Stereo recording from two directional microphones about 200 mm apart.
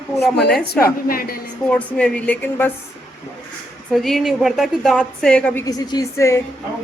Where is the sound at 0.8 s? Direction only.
50° left (ahead or behind).